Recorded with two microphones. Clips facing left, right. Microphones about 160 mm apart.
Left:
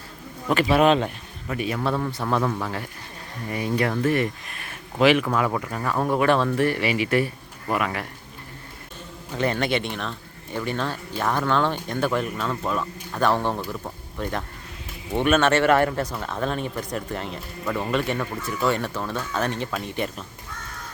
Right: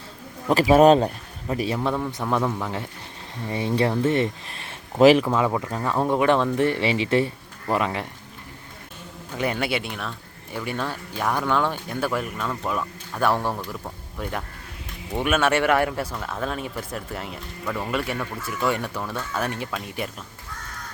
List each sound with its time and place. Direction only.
0.7 s speech: 40° right (ahead or behind)
2.4 s speech: 5° right (ahead or behind)
2.6 s speech: 20° right (ahead or behind)
5.3 s speech: 15° right (ahead or behind)
9.4 s speech: 10° right (ahead or behind)
13.6 s speech: 5° left (ahead or behind)
14.2 s speech: 10° right (ahead or behind)